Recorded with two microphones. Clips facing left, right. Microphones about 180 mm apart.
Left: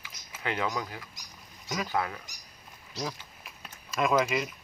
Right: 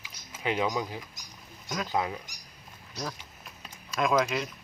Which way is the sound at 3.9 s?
Centre (ahead or behind).